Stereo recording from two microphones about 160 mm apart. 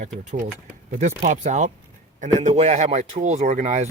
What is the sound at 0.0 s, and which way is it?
Speech, 50° right (ahead or behind).